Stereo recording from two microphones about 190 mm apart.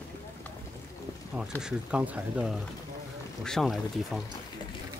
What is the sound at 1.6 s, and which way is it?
Speech, 5° right (ahead or behind).